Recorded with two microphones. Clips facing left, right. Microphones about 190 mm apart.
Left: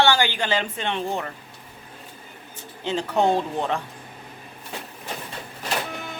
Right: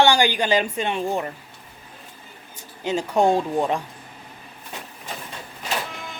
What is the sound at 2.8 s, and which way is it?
A woman's voice, 10° right (ahead or behind).